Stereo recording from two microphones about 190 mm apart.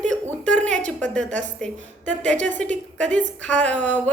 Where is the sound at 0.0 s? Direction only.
5° left (ahead or behind).